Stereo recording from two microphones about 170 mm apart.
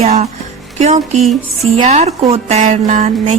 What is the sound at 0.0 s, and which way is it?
Music, 40° right (ahead or behind).